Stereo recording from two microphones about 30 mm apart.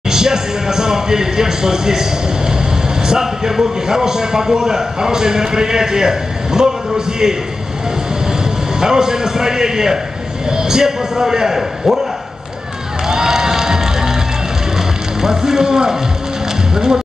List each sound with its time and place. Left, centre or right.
0.1 s speech: centre
3.0 s vehicle: right
3.8 s a man's voice: centre
8.3 s a man's voice: right
13.1 s music: right
15.2 s a man's voice: right